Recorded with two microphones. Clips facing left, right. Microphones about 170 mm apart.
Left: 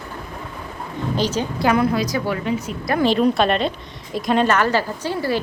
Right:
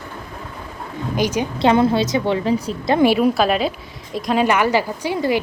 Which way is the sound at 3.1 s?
5° right (ahead or behind).